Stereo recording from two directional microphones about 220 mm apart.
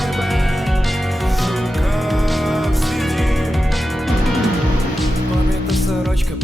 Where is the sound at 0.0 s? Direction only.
Centre (ahead or behind).